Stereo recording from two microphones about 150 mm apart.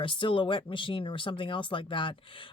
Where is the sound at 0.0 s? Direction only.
35° left (ahead or behind).